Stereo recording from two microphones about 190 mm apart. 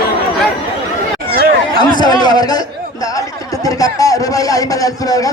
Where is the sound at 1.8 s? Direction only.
20° left (ahead or behind).